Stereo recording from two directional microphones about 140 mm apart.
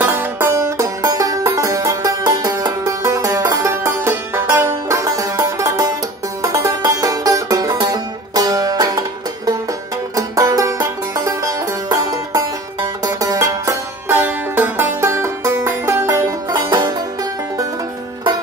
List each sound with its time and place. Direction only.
0.0 s music: 15° right (ahead or behind)
10.1 s music: 25° right (ahead or behind)